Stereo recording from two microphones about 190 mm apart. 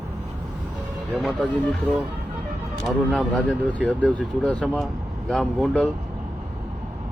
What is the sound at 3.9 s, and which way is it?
Speech, 5° left (ahead or behind).